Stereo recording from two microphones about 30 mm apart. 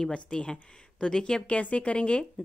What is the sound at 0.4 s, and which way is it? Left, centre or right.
Speech, left.